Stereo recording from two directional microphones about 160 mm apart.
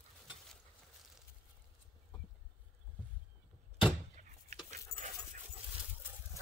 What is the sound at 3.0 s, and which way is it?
Boat, 10° left (ahead or behind).